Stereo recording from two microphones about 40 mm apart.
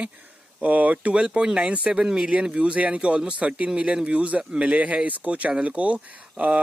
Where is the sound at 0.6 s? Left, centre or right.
Right.